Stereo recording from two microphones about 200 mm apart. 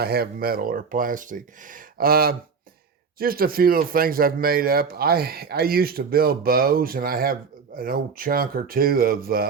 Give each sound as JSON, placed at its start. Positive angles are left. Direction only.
{"t": 0.0, "sound": "a man's voice", "side_deg": -50}